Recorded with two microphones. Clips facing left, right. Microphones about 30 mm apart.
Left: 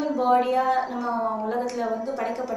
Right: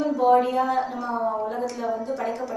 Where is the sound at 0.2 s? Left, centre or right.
Centre.